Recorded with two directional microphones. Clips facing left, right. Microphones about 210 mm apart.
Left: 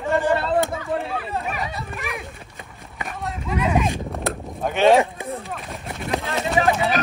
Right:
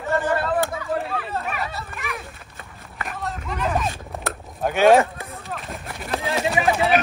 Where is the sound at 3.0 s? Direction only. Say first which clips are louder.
Left 2 dB; centre (ahead or behind).